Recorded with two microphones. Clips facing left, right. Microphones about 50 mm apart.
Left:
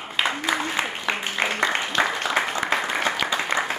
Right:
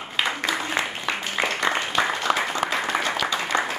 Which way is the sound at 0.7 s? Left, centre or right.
Centre.